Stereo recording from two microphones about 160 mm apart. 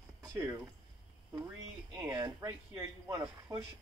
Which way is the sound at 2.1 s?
25° right (ahead or behind).